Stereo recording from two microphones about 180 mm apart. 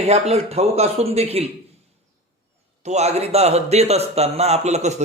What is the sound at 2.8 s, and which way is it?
A man's voice, 40° right (ahead or behind).